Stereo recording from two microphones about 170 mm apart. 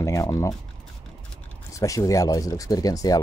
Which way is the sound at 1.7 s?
20° left (ahead or behind).